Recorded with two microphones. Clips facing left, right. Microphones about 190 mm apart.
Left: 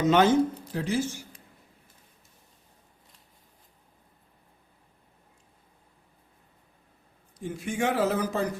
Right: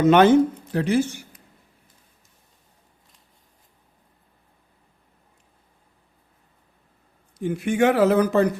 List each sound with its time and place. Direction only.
0.0 s speech: 65° right (ahead or behind)
7.3 s speech: 65° right (ahead or behind)